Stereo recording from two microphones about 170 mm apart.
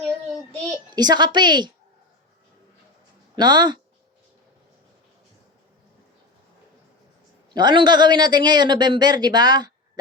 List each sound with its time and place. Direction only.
0.9 s a man's voice: 25° right (ahead or behind)
3.3 s a man's voice: 25° right (ahead or behind)
7.5 s a man's voice: 25° right (ahead or behind)